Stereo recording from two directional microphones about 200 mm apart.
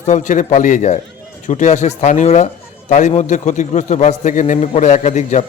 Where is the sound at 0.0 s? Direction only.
35° left (ahead or behind).